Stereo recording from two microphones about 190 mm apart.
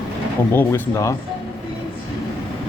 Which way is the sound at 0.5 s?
15° left (ahead or behind).